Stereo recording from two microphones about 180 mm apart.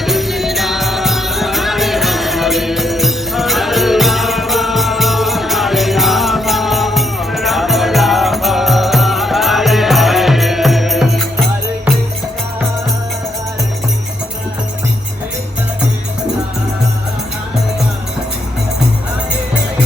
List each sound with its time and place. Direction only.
0.0 s music: centre (ahead or behind)